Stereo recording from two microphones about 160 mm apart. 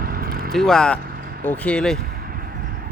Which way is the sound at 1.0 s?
70° right (ahead or behind).